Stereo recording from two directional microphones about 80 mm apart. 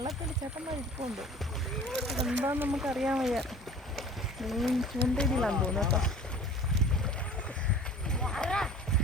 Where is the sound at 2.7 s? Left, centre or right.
Centre.